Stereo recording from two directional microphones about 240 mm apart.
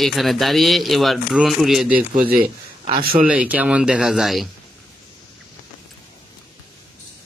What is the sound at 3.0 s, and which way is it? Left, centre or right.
Speech, right.